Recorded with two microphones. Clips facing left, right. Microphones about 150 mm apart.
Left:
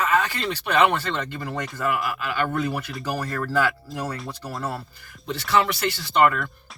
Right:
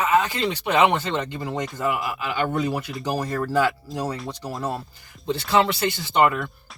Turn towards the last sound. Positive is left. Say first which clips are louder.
# even
turn(degrees=-20)  # may be behind; listen again after turning